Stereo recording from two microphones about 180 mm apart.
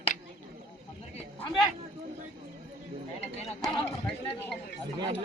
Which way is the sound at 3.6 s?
25° left (ahead or behind).